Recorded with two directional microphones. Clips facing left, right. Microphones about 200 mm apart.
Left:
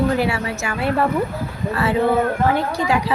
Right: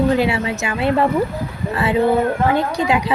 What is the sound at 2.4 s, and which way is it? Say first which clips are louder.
Speech: right 2 dB; 15° right (ahead or behind).